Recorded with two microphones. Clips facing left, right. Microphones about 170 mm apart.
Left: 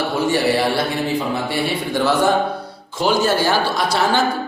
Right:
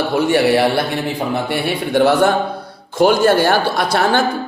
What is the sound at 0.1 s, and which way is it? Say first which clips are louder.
A man's voice: right 5 dB; 60° right (ahead or behind).